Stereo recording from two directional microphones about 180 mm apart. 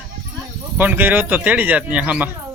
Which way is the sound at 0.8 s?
10° right (ahead or behind).